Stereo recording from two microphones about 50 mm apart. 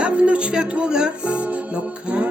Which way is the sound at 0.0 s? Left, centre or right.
Right.